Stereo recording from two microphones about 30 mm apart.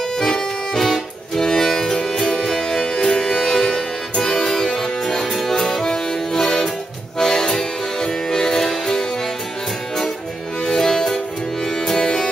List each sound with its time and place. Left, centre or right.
0.2 s accordion: centre
1.6 s music: centre
5.3 s music: centre
5.9 s accordion: centre
7.2 s music: centre
10.6 s music: centre